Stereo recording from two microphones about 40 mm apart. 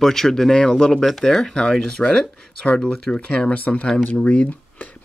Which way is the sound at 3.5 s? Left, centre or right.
Left.